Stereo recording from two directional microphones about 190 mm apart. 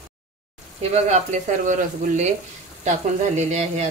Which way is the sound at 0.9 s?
40° right (ahead or behind).